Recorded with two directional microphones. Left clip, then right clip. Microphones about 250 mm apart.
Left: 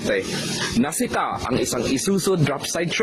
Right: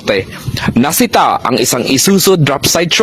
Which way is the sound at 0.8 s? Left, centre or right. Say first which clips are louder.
Right 14 dB; right.